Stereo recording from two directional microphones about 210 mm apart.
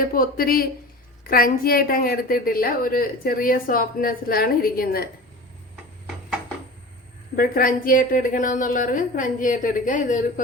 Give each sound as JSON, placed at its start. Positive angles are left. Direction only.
{"t": 0.0, "sound": "a woman's voice", "side_deg": 45}
{"t": 7.3, "sound": "a woman's voice", "side_deg": 40}